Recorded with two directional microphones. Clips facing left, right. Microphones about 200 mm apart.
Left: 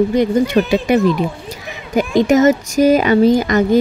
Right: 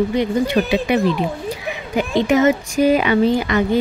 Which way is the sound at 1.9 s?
40° left (ahead or behind).